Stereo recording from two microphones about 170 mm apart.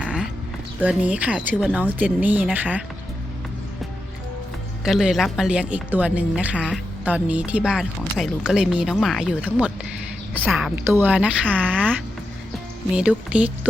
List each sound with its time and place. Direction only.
0.0 s a sound: 5° right (ahead or behind)
0.8 s speech: 10° right (ahead or behind)
4.9 s a woman's voice: centre (ahead or behind)
13.0 s speech: 5° right (ahead or behind)